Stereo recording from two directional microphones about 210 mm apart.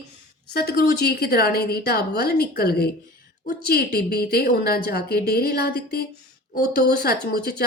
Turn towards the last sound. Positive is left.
turn(degrees=45)  # may be behind; listen again after turning